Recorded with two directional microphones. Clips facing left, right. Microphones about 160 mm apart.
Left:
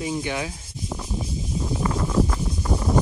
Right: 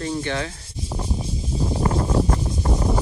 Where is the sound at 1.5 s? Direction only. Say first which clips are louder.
Right 3 dB; 35° right (ahead or behind).